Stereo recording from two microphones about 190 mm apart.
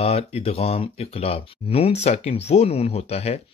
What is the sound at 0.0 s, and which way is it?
Speech, 30° left (ahead or behind).